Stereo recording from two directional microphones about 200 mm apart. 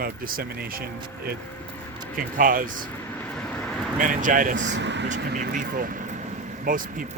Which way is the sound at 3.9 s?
40° right (ahead or behind).